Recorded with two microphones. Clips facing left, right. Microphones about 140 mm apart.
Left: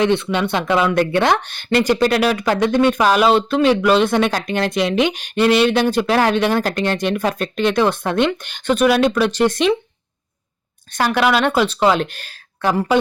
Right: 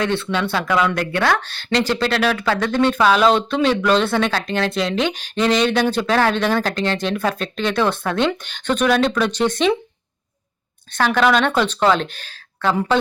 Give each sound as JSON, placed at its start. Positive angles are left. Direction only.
{"t": 0.0, "sound": "speech", "side_deg": 20}
{"t": 10.9, "sound": "speech", "side_deg": 10}